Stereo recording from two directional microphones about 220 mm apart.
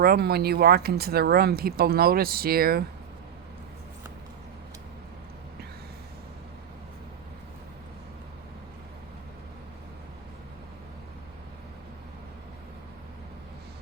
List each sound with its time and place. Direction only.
0.0 s speech: 45° right (ahead or behind)